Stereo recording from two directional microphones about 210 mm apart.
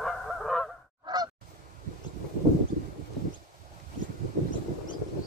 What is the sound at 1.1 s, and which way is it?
Goose, 20° right (ahead or behind).